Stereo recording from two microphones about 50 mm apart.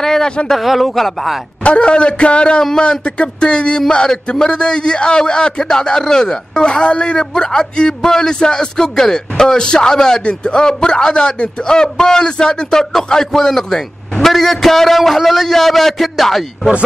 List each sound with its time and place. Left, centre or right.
0.0 s a sound: centre
0.5 s a man's voice: centre
1.6 s a man's voice: left; by 16.7 s centre